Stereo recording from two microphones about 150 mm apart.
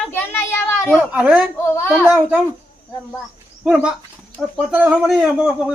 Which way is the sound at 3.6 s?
5° right (ahead or behind).